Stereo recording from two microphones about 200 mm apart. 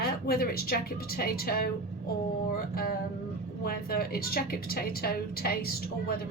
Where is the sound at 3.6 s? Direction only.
50° left (ahead or behind).